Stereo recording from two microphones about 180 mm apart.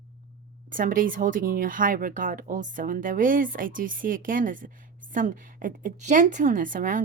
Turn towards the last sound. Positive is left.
turn(degrees=-45)  # may be behind; listen again after turning